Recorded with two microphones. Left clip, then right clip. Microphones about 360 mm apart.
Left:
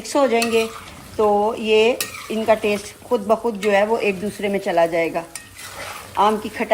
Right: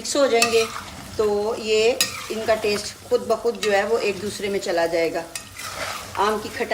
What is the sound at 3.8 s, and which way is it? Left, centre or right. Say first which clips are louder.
Stir: left 3 dB; centre.